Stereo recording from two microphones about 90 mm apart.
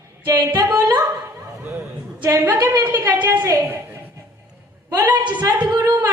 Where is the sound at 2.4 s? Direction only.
20° right (ahead or behind).